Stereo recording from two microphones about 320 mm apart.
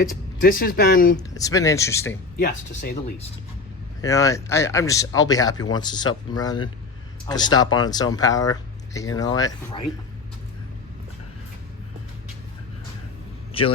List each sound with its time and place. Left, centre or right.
0.0 s speech: left
1.1 s speech: centre
2.4 s speech: left
4.0 s speech: centre
13.5 s a man's voice: centre